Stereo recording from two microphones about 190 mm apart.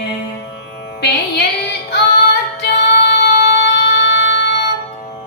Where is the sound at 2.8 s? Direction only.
65° left (ahead or behind).